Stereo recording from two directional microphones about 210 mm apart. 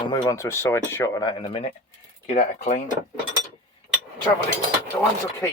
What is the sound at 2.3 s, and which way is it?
Speech, 30° left (ahead or behind).